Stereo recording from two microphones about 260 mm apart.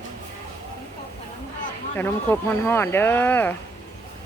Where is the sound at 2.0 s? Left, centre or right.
Centre.